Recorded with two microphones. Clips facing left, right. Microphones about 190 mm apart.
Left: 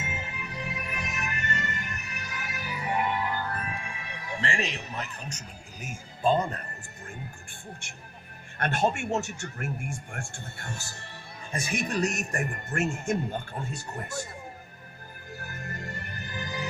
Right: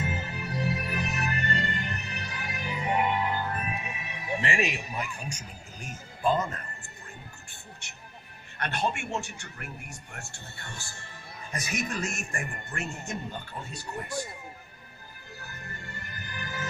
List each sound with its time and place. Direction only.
0.0 s music: 35° right (ahead or behind); by 5.5 s 10° right (ahead or behind)
6.2 s speech: 30° left (ahead or behind)
8.5 s speech: 45° left (ahead or behind)
15.4 s music: 50° left (ahead or behind); by 16.6 s 20° left (ahead or behind)